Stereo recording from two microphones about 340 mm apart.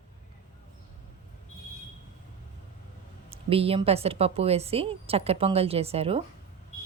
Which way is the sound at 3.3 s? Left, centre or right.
Centre.